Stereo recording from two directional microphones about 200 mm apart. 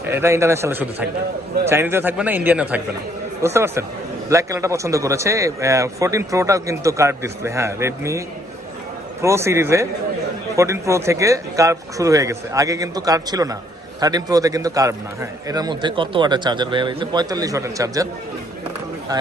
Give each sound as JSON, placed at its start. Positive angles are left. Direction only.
{"t": 0.1, "sound": "a man's voice", "side_deg": -15}
{"t": 9.2, "sound": "a man's voice", "side_deg": -15}